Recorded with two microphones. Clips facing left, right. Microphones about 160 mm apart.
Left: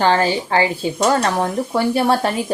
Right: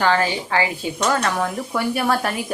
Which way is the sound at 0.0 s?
30° left (ahead or behind).